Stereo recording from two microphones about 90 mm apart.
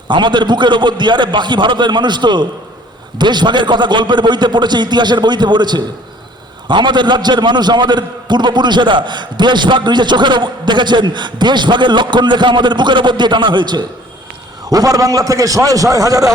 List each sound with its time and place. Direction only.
0.1 s a man's voice: 60° right (ahead or behind)
14.7 s a man's voice: 40° right (ahead or behind)